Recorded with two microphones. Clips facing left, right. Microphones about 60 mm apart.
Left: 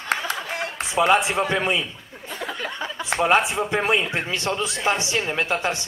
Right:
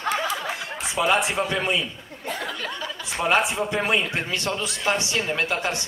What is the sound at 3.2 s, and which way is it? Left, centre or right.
A man's voice, left.